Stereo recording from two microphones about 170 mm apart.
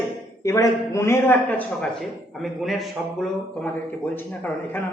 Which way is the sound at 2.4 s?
Centre (ahead or behind).